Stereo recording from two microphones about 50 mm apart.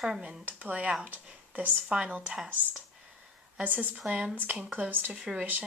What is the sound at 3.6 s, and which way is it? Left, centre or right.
Speech, right.